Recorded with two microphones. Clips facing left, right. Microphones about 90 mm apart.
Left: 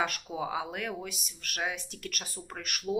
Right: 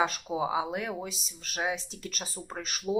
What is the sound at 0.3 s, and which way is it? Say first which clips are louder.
Speech: right 5 dB; 15° right (ahead or behind).